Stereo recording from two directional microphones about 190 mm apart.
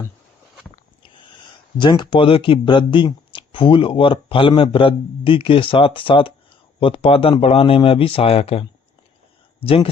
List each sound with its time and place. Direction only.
1.0 s speech: 25° left (ahead or behind)
9.6 s speech: 30° left (ahead or behind)